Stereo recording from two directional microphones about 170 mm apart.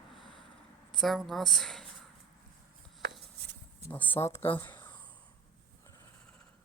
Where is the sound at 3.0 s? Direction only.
80° right.